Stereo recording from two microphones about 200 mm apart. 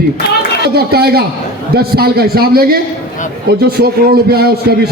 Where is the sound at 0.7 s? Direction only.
50° right (ahead or behind).